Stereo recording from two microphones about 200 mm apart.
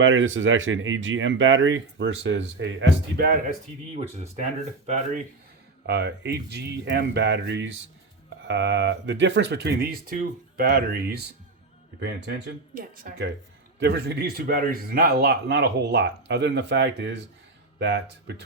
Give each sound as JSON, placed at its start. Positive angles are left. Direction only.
{"t": 0.0, "sound": "speech", "side_deg": -75}
{"t": 4.9, "sound": "speech", "side_deg": -35}
{"t": 5.8, "sound": "speech", "side_deg": -55}
{"t": 12.7, "sound": "speech", "side_deg": -45}